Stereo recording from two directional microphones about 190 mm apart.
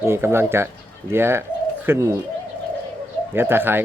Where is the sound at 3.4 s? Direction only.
10° right (ahead or behind).